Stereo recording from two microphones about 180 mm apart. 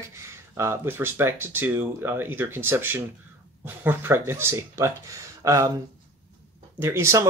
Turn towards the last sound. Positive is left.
turn(degrees=-15)  # may be behind; listen again after turning